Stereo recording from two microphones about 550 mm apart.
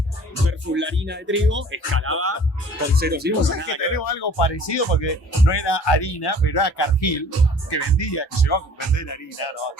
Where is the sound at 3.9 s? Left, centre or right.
Left.